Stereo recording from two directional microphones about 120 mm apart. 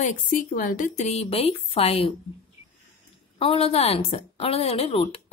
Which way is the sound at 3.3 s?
55° left (ahead or behind).